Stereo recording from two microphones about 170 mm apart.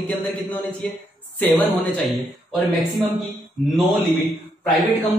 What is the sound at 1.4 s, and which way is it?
Speech, 5° left (ahead or behind).